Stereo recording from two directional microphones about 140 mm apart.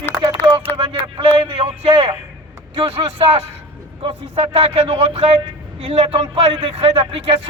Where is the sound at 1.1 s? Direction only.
45° right (ahead or behind).